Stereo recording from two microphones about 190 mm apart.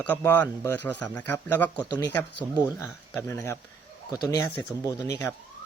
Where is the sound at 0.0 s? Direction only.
10° left (ahead or behind).